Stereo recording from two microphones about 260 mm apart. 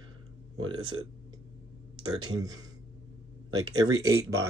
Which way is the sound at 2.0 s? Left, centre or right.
Centre.